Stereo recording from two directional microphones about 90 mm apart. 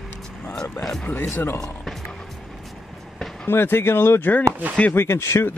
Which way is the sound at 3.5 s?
25° left (ahead or behind).